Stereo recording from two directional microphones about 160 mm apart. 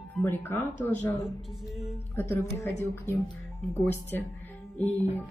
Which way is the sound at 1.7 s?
5° right (ahead or behind).